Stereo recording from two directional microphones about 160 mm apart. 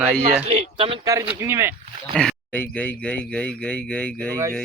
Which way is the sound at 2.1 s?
5° left (ahead or behind).